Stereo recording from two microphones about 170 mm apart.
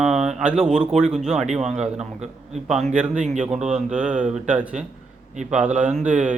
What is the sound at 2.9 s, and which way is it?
Speech, 5° right (ahead or behind).